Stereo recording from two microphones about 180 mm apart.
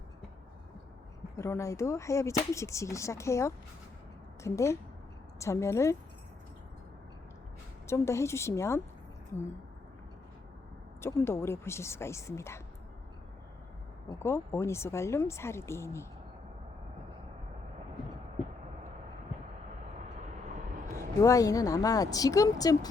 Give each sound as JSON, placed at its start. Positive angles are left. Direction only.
{"t": 1.4, "sound": "speech", "side_deg": 15}
{"t": 7.9, "sound": "speech", "side_deg": 15}
{"t": 11.0, "sound": "speech", "side_deg": 15}
{"t": 14.2, "sound": "speech", "side_deg": 15}
{"t": 20.9, "sound": "a woman's voice", "side_deg": 15}